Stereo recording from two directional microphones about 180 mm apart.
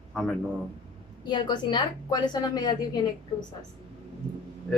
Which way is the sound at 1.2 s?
25° left (ahead or behind).